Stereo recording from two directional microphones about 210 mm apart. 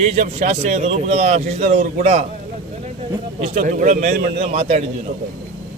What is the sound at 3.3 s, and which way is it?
Speech, 30° right (ahead or behind).